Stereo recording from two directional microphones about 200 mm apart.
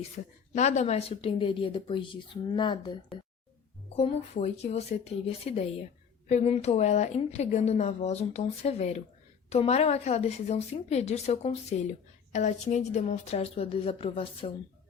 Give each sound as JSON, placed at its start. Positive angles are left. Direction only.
{"t": 0.5, "sound": "a woman's voice", "side_deg": 35}